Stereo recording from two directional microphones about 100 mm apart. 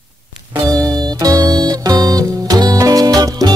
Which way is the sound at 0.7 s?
35° right (ahead or behind).